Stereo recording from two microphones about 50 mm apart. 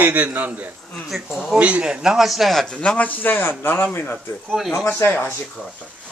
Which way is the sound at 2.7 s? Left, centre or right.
Left.